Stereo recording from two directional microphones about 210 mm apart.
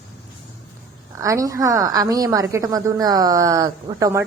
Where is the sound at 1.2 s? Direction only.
15° right (ahead or behind).